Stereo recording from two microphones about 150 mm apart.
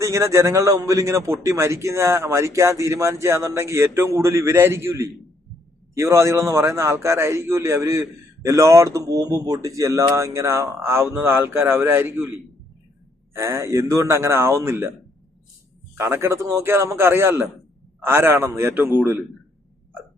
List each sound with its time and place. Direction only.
0.0 s a man's voice: 20° right (ahead or behind)
13.3 s a man's voice: 20° right (ahead or behind)
16.0 s speech: 15° right (ahead or behind)